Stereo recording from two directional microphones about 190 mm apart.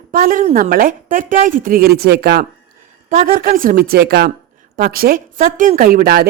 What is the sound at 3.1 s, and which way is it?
A woman's voice, 45° right (ahead or behind).